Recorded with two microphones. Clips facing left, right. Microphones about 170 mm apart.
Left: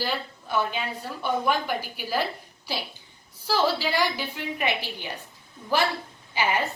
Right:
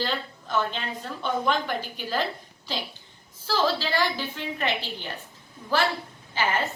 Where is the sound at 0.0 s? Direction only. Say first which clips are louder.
Even; 10° left (ahead or behind).